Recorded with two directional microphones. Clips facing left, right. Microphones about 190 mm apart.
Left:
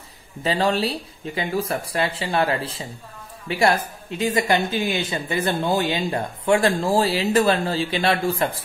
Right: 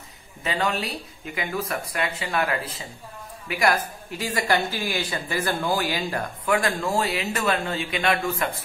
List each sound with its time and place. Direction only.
0.4 s speech: 30° left (ahead or behind)